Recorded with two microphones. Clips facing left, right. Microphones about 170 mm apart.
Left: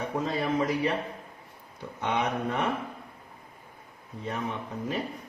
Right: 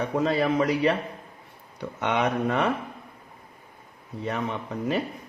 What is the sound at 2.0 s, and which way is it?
Speech, 80° right.